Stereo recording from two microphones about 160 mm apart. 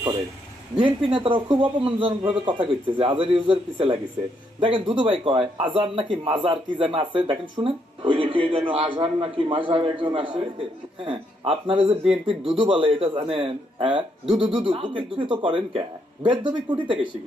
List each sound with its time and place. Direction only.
0.8 s a man's voice: 30° right (ahead or behind)